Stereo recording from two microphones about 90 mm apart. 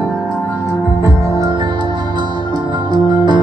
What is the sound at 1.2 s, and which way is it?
Music, 35° right (ahead or behind).